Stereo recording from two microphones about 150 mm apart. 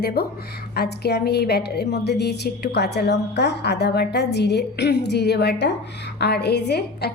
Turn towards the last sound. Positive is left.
turn(degrees=90)